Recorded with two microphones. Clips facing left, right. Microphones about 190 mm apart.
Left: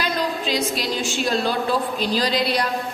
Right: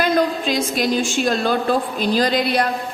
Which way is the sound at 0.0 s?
50° right (ahead or behind).